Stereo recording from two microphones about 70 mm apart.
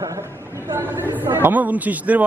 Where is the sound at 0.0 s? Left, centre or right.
Right.